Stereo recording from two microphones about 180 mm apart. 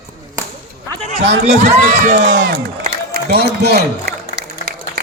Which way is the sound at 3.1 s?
60° right (ahead or behind).